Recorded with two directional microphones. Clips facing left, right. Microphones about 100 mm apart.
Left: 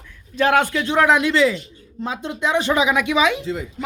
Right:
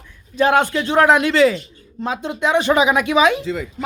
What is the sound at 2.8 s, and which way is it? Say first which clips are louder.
Speech: right 3 dB; 45° right (ahead or behind).